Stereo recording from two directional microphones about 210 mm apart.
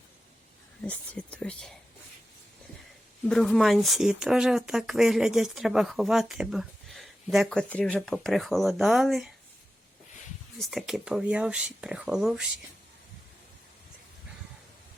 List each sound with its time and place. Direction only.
0.8 s speech: 5° left (ahead or behind)
3.2 s speech: centre (ahead or behind)
10.6 s speech: centre (ahead or behind)